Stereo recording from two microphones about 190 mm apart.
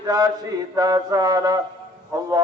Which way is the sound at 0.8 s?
20° right (ahead or behind).